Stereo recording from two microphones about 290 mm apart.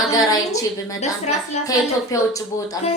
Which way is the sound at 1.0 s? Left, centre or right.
Left.